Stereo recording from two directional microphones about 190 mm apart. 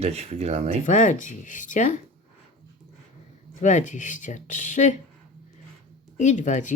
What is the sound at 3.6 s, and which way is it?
Speech, 40° left (ahead or behind).